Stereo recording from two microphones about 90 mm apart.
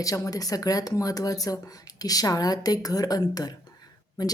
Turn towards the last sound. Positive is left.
turn(degrees=45)  # may be behind; listen again after turning